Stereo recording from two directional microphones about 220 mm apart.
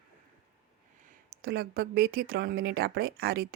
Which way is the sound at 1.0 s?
45° right (ahead or behind).